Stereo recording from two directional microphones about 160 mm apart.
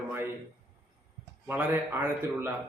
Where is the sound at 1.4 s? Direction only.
10° right (ahead or behind).